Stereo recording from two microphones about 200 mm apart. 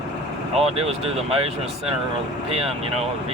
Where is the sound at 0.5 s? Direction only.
30° right (ahead or behind).